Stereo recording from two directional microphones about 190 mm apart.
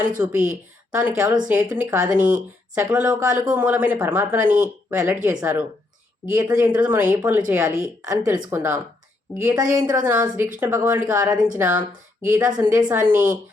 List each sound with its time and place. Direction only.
0.2 s a woman's voice: 5° right (ahead or behind)